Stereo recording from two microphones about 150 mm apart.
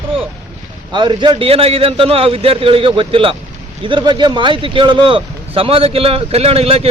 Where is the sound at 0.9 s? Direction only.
30° right (ahead or behind).